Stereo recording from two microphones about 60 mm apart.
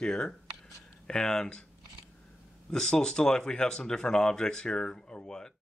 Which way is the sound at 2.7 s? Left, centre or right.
Centre.